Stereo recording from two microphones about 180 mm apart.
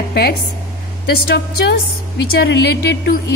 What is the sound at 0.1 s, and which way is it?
A woman's voice, 65° left (ahead or behind).